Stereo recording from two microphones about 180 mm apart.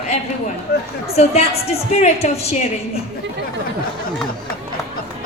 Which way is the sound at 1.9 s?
35° left (ahead or behind).